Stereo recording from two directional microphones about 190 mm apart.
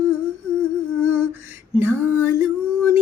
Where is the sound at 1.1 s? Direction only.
10° right (ahead or behind).